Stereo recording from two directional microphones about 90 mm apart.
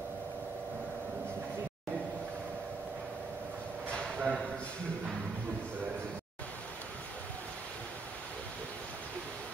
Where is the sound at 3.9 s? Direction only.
10° left (ahead or behind).